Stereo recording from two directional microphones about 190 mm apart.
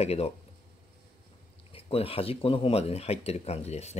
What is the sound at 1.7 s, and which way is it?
Speech, 30° left (ahead or behind).